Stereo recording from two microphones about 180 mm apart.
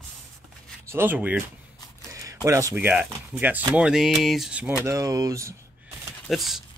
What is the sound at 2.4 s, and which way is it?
Speech, 15° right (ahead or behind).